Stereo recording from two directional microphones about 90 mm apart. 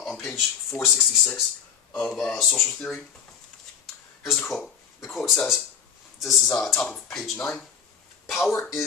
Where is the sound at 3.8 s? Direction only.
5° left (ahead or behind).